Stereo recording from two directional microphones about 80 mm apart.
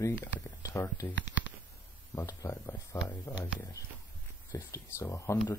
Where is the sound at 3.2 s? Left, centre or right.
Left.